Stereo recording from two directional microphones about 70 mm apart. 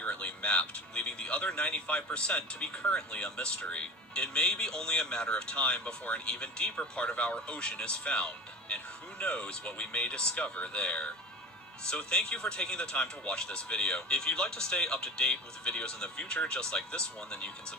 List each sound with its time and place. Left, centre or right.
0.0 s speech: centre